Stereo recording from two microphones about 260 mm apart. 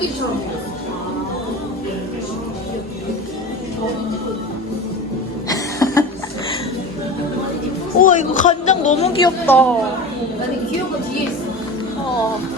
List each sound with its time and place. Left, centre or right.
5.5 s cough: centre
7.9 s speech: left
9.2 s a woman's voice: centre